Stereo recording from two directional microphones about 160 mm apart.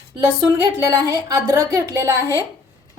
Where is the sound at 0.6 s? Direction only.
20° right (ahead or behind).